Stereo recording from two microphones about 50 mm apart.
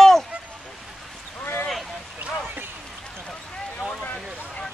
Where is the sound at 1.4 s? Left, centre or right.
Left.